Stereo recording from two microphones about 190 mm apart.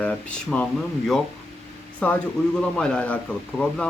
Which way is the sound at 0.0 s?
5° left (ahead or behind).